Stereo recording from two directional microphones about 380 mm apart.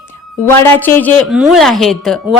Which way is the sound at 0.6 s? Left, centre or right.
Centre.